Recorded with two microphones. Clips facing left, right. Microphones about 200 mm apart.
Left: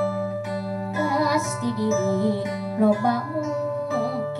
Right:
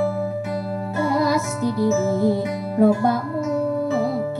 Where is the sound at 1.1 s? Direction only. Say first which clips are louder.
Right 4 dB; 40° right (ahead or behind).